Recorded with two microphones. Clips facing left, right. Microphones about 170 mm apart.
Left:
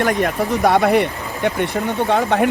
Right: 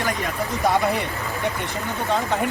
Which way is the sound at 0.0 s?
60° left (ahead or behind).